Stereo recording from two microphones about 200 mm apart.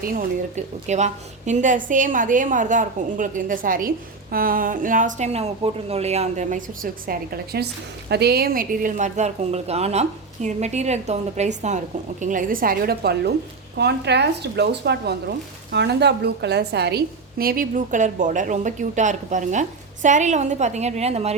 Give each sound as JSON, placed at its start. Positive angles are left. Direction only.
{"t": 0.0, "sound": "a woman's voice", "side_deg": -40}